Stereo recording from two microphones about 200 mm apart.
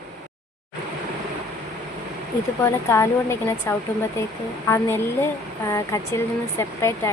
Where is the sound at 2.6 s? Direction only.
15° left (ahead or behind).